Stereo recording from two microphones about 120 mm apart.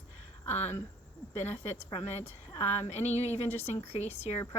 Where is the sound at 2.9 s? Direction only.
65° left (ahead or behind).